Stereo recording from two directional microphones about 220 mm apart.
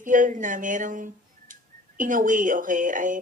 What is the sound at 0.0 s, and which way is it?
Speech, 35° right (ahead or behind).